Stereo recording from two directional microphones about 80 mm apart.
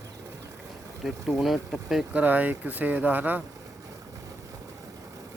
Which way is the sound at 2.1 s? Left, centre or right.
Right.